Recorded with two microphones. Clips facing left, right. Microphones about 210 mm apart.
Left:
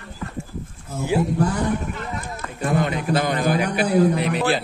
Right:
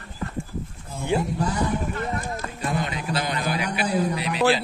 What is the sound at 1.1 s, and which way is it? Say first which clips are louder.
Speech: left 3 dB; 5° left (ahead or behind).